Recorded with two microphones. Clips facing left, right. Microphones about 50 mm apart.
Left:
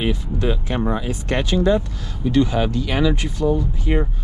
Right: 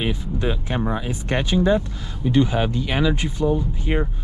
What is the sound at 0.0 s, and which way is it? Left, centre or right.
Speech, right.